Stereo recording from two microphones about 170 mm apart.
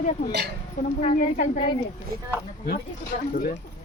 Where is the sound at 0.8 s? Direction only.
45° left (ahead or behind).